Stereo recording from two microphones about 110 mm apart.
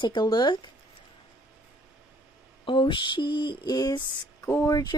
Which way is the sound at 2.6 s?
50° left (ahead or behind).